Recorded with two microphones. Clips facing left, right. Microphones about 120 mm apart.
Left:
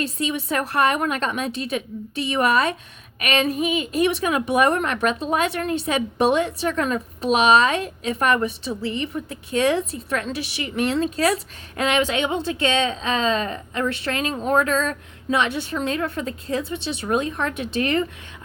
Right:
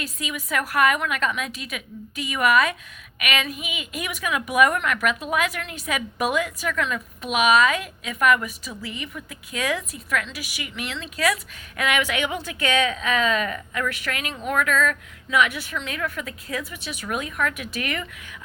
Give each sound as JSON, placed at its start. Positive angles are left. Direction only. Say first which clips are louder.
{"t": 0.0, "sound": "a woman's voice", "louder": "left 7 dB", "side_deg": 30}